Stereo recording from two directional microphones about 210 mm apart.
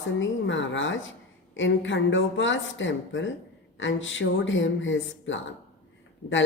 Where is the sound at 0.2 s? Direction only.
60° left (ahead or behind).